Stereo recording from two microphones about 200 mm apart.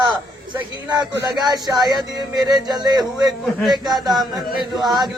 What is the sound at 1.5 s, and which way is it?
Music, 20° right (ahead or behind).